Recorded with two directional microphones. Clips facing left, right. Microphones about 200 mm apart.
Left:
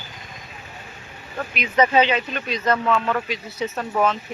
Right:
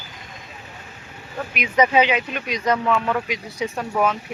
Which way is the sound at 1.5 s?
10° right (ahead or behind).